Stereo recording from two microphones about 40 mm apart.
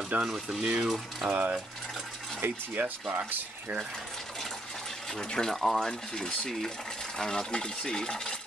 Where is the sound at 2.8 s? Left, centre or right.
Right.